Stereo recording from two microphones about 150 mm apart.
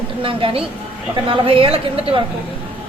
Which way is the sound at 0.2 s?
35° right (ahead or behind).